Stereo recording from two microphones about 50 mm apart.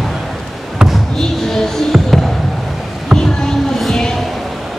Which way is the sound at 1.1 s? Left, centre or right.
Centre.